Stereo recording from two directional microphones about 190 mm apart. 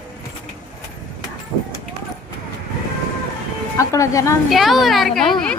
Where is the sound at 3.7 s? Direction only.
15° left (ahead or behind).